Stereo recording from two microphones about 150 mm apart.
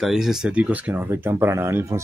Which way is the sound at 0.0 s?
Centre (ahead or behind).